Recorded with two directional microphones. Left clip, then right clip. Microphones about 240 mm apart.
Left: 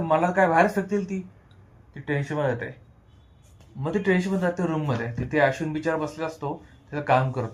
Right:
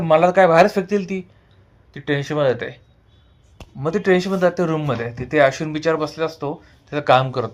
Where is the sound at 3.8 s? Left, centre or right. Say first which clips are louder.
Right 7 dB; right.